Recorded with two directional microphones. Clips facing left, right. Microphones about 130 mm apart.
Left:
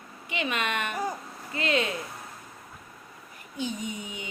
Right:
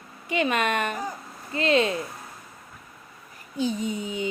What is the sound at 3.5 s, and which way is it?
Speech, 35° right (ahead or behind).